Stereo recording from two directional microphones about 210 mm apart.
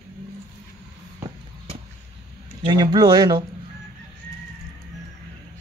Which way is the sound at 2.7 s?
20° right (ahead or behind).